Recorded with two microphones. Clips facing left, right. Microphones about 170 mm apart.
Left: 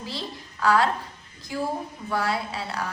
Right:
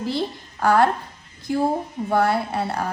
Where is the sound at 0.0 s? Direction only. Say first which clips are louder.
Right 9 dB; 60° right (ahead or behind).